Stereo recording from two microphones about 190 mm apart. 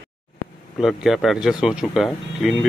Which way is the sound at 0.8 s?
Centre (ahead or behind).